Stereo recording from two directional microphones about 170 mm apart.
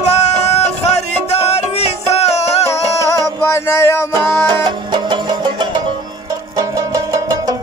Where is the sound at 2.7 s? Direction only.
15° left (ahead or behind).